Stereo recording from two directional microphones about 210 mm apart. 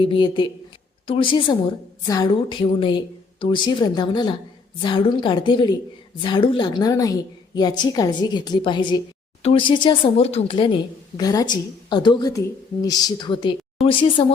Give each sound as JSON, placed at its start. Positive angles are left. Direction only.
{"t": 0.0, "sound": "a woman's voice", "side_deg": 25}